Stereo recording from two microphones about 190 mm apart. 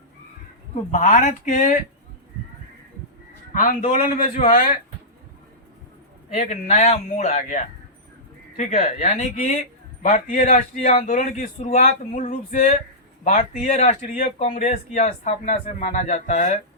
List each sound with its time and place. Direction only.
0.9 s speech: 40° left (ahead or behind)
3.5 s a man's voice: 45° left (ahead or behind)
6.5 s speech: 35° left (ahead or behind)
10.8 s speech: 35° left (ahead or behind)